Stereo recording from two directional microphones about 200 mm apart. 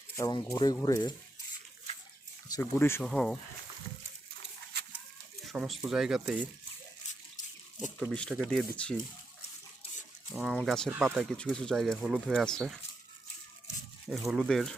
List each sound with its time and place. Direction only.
0.2 s speech: 20° left (ahead or behind)
2.5 s speech: 10° left (ahead or behind)
5.5 s speech: centre (ahead or behind)
8.1 s speech: centre (ahead or behind)
10.3 s speech: centre (ahead or behind)
14.1 s speech: centre (ahead or behind)